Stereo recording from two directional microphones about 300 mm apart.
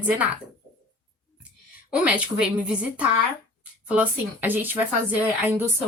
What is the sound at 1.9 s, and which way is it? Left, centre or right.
Speech, centre.